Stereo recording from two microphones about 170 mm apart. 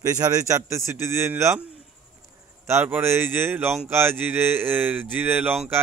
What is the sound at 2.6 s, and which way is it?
A man's voice, 15° right (ahead or behind).